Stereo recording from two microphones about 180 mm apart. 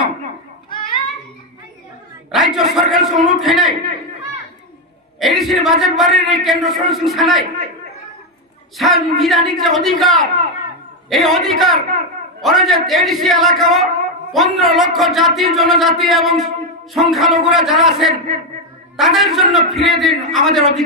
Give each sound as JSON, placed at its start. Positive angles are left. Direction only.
{"t": 0.7, "sound": "a sound", "side_deg": 25}
{"t": 2.3, "sound": "a man's voice", "side_deg": 0}
{"t": 5.2, "sound": "a man's voice", "side_deg": 0}
{"t": 8.7, "sound": "a man's voice", "side_deg": 0}